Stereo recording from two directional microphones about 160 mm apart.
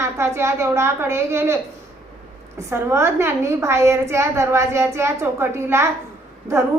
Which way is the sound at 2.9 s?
15° right (ahead or behind).